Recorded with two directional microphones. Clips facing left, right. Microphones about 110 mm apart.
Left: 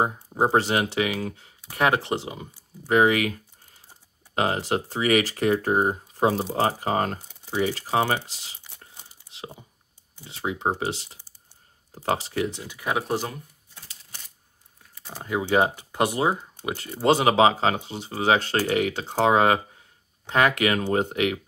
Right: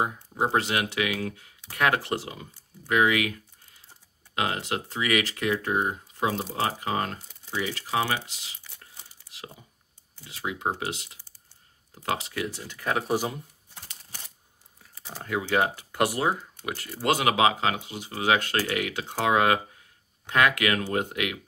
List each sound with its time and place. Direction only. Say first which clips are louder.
0.0 s speech: left 4 dB; 35° left (ahead or behind)
2.8 s speech: left 4 dB; 35° left (ahead or behind)
4.4 s speech: left 5 dB; 35° left (ahead or behind)
8.6 s tearing: left 2 dB; 20° left (ahead or behind)
10.2 s speech: left 3 dB; 30° left (ahead or behind)
12.4 s speech: left 2 dB; 15° left (ahead or behind)
13.0 s speech: right 1 dB; 10° right (ahead or behind)
14.8 s typing: left 1 dB; centre (ahead or behind)
15.2 s speech: left 3 dB; 20° left (ahead or behind)